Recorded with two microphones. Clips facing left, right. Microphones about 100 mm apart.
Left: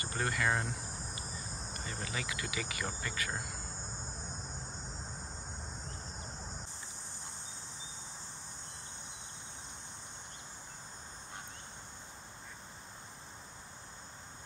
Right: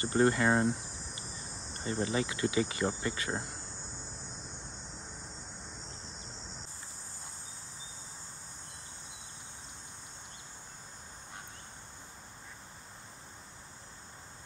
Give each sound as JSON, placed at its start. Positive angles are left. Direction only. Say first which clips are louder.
{"t": 0.0, "sound": "speech", "louder": "right 8 dB", "side_deg": -25}
{"t": 1.7, "sound": "speech", "louder": "right 10 dB", "side_deg": -30}